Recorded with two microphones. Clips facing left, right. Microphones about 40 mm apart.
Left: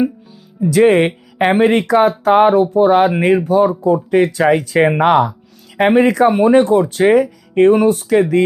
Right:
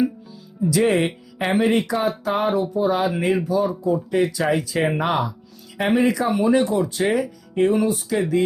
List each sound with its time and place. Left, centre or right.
0.6 s speech: left